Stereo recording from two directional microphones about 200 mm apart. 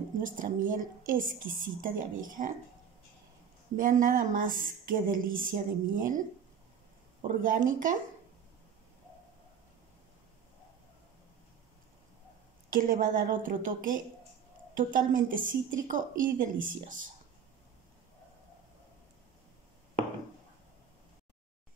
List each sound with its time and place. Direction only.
0.2 s speech: 40° right (ahead or behind)
3.7 s a woman's voice: 45° right (ahead or behind)
12.6 s a woman's voice: 45° right (ahead or behind)